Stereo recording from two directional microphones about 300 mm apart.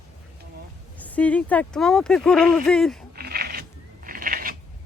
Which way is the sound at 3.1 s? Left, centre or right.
Right.